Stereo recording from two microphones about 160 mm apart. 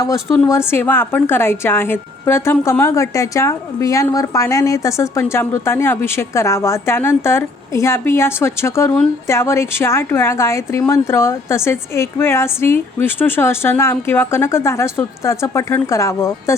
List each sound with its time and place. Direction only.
0.0 s a woman's voice: 20° left (ahead or behind)